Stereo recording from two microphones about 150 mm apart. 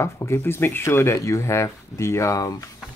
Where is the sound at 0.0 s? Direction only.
20° left (ahead or behind).